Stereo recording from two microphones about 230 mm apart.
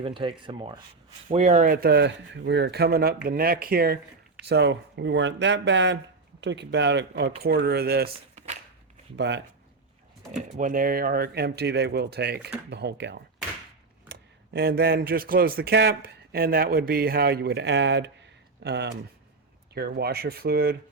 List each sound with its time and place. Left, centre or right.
0.0 s speech: right
8.1 s a sound: right
9.1 s speech: right
10.6 s speech: right